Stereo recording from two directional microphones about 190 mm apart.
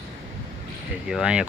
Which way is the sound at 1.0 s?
5° right (ahead or behind).